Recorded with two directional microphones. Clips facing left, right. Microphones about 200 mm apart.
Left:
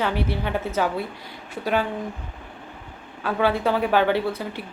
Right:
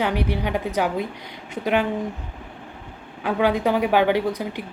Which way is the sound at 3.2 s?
15° right (ahead or behind).